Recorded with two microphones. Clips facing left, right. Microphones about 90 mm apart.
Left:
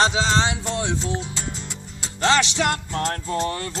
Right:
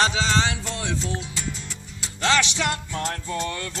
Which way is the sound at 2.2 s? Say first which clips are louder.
Left 3 dB; 30° left (ahead or behind).